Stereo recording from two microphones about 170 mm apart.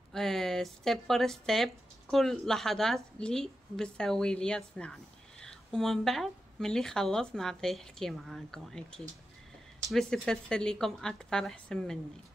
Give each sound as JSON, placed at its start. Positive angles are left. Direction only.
{"t": 0.1, "sound": "speech", "side_deg": 0}